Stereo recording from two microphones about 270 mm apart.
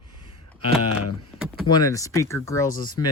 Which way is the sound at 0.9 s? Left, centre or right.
Left.